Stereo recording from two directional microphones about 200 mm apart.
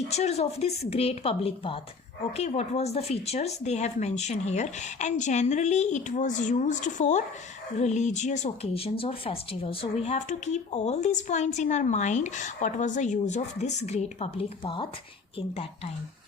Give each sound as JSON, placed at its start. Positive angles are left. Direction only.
{"t": 0.1, "sound": "speech", "side_deg": 35}